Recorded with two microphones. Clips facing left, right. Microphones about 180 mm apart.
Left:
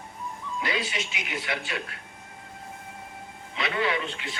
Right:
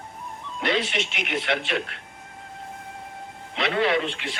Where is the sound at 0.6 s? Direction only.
80° right.